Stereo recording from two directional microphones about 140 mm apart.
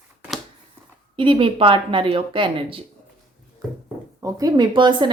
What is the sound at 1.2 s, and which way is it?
A woman's voice, 40° right (ahead or behind).